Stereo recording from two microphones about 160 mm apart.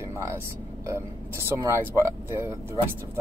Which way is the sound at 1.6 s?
20° right (ahead or behind).